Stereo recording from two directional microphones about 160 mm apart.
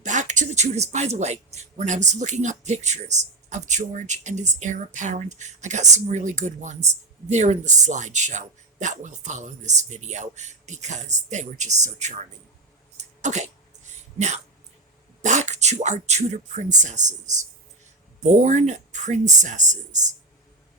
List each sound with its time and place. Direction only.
0.0 s a man's voice: 50° right (ahead or behind)
13.0 s a sound: 45° right (ahead or behind)
15.2 s speech: 50° right (ahead or behind)
18.2 s a man's voice: 50° right (ahead or behind)